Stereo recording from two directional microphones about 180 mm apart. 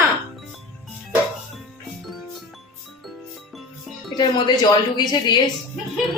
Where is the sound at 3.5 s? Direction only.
Centre (ahead or behind).